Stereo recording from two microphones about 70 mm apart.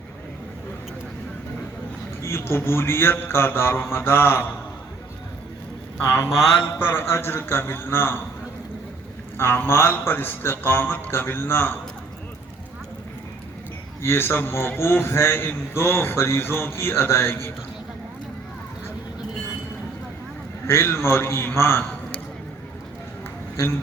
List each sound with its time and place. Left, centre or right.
2.2 s a man's voice: left
6.0 s a man's voice: left
9.4 s a man's voice: left
14.0 s a man's voice: left
20.7 s a man's voice: left